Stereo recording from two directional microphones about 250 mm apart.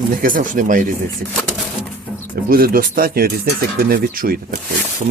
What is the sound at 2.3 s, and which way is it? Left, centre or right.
Speech, right.